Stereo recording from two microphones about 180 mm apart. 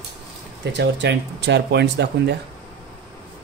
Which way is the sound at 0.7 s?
75° right (ahead or behind).